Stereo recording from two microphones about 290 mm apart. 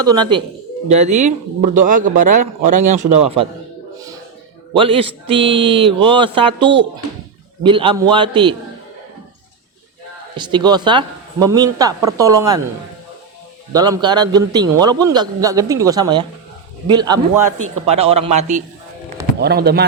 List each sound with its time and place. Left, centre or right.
0.0 s a man's voice: centre
4.7 s a man's voice: centre
10.3 s a man's voice: centre
13.7 s a man's voice: centre
19.4 s speech: right